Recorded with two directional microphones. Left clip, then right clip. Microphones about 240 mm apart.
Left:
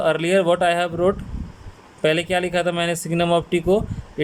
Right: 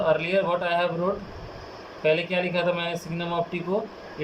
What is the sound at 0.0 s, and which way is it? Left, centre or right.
Speech, left.